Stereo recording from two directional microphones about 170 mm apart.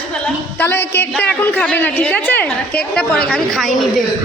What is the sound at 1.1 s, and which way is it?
A woman's voice, 10° left (ahead or behind).